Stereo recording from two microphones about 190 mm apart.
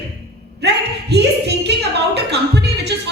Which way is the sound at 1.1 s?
60° right (ahead or behind).